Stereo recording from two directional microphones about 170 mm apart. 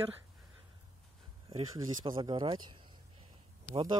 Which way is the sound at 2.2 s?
30° right (ahead or behind).